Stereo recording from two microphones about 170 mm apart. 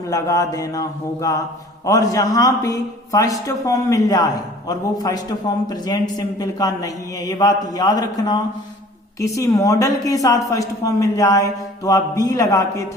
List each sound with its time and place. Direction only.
0.1 s a man's voice: 20° left (ahead or behind)